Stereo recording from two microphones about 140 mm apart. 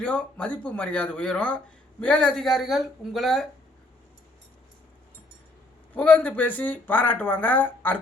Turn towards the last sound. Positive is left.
turn(degrees=10)  # may be behind; listen again after turning